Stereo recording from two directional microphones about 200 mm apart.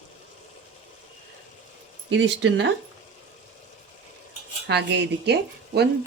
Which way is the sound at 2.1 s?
65° right (ahead or behind).